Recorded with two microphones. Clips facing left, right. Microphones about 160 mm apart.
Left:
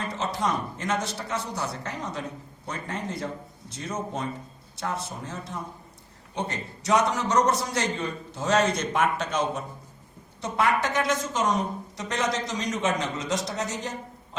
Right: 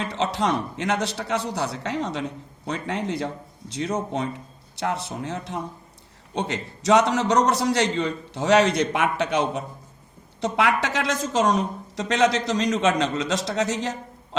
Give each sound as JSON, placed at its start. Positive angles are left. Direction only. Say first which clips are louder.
{"t": 0.0, "sound": "speech", "louder": "right 4 dB", "side_deg": -75}